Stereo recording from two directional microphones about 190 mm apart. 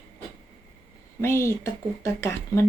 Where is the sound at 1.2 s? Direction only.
15° left (ahead or behind).